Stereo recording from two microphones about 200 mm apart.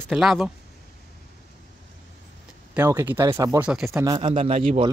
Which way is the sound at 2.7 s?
15° right (ahead or behind).